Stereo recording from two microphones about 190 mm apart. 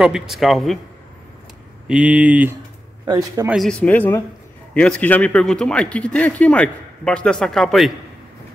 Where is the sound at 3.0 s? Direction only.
20° right (ahead or behind).